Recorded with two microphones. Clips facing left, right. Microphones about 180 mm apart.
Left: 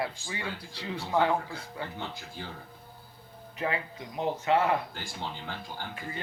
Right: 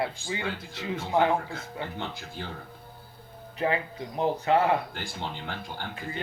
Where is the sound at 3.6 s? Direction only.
30° right (ahead or behind).